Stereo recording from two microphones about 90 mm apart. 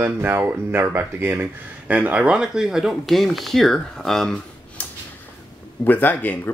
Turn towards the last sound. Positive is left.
turn(degrees=20)  # may be behind; listen again after turning